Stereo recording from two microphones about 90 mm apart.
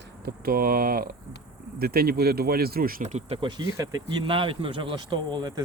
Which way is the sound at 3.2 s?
90° right.